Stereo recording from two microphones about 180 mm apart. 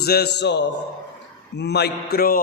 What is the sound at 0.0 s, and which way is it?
A man's voice, 60° left (ahead or behind).